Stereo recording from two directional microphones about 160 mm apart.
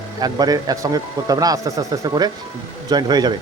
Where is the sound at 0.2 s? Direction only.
25° right (ahead or behind).